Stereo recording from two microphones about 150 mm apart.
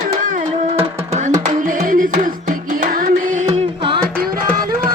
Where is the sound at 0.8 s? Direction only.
45° right (ahead or behind).